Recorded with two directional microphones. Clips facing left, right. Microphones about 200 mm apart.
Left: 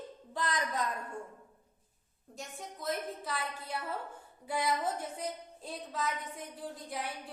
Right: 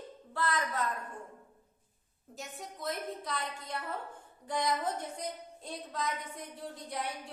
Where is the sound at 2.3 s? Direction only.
Centre (ahead or behind).